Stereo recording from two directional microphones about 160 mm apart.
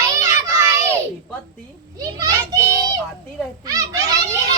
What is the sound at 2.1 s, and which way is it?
A child's voice, 20° right (ahead or behind).